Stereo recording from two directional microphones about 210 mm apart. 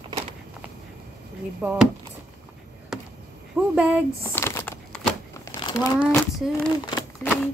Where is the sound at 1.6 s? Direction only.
5° right (ahead or behind).